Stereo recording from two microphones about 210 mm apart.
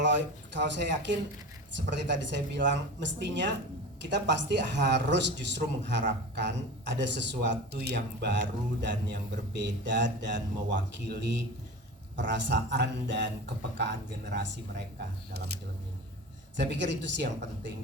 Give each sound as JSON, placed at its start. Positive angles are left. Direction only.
{"t": 0.0, "sound": "speech", "side_deg": -60}
{"t": 16.6, "sound": "speech", "side_deg": -55}